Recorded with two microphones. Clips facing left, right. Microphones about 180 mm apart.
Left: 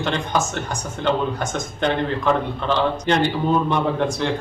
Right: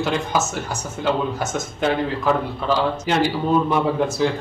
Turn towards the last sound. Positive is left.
turn(degrees=-5)  # may be behind; listen again after turning